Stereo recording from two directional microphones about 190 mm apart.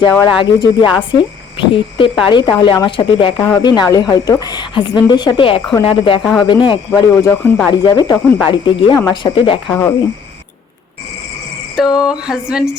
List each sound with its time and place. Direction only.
0.0 s speech: 20° left (ahead or behind)
7.4 s speech: 10° left (ahead or behind)
7.7 s speech: 20° left (ahead or behind)
11.8 s a sound: centre (ahead or behind)